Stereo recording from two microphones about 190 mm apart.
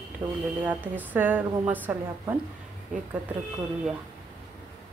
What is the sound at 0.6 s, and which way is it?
A woman's voice, 10° right (ahead or behind).